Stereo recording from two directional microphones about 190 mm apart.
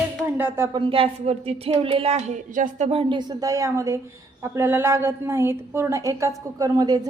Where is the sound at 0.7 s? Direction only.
30° right (ahead or behind).